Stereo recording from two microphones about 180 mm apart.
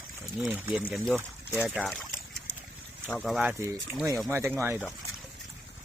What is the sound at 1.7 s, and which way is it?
Trickle, 5° right (ahead or behind).